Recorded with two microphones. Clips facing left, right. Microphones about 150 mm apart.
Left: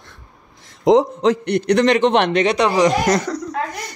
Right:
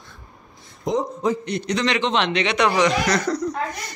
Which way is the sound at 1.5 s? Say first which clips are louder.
Left 8 dB; 55° left (ahead or behind).